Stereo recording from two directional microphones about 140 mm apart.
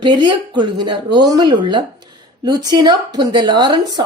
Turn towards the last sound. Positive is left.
turn(degrees=-30)  # may be behind; listen again after turning